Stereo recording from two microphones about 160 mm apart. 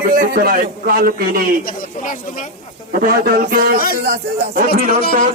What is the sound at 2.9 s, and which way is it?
Speech, 60° right (ahead or behind).